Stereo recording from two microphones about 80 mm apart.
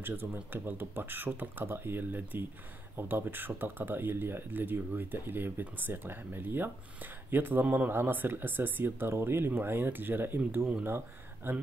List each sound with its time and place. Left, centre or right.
0.0 s speech: right